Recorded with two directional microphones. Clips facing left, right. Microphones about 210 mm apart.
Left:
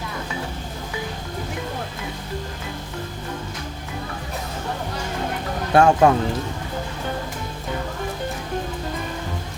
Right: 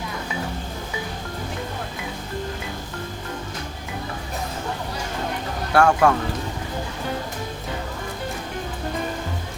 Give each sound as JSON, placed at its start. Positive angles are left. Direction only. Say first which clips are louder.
{"t": 5.7, "sound": "speech", "louder": "left 2 dB", "side_deg": 20}